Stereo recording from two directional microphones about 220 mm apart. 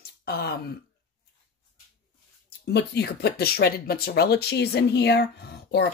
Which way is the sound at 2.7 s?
50° left (ahead or behind).